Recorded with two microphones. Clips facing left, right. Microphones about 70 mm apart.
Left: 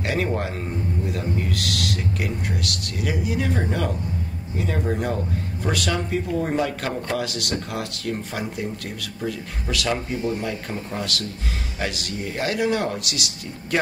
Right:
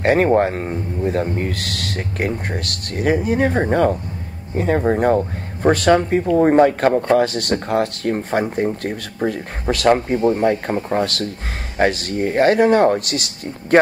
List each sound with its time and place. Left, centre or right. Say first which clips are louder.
0.0 s speech: right 10 dB; right